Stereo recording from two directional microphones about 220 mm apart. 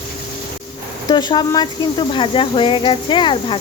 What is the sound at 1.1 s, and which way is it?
Speech, 20° left (ahead or behind).